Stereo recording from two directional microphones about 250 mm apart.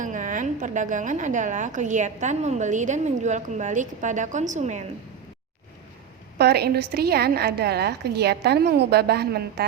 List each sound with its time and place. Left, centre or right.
0.0 s a woman's voice: right
6.4 s a woman's voice: right